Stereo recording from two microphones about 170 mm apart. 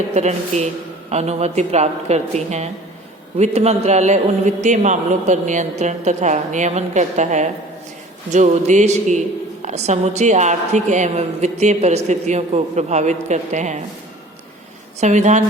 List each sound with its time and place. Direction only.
0.1 s a woman's voice: 40° right (ahead or behind)
15.0 s a woman's voice: 45° right (ahead or behind)